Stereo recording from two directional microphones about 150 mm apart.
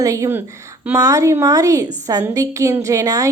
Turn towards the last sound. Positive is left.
turn(degrees=-20)  # may be behind; listen again after turning